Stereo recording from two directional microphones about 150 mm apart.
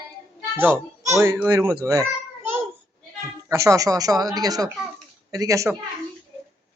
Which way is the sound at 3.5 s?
20° right (ahead or behind).